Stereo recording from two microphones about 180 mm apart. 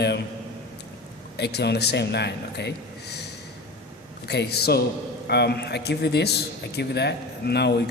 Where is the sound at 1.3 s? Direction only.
65° left (ahead or behind).